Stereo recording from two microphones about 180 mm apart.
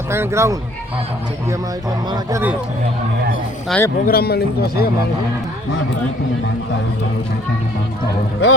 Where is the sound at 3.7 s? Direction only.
Centre (ahead or behind).